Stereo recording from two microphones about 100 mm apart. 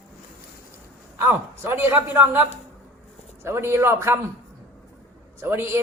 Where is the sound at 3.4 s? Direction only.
25° right (ahead or behind).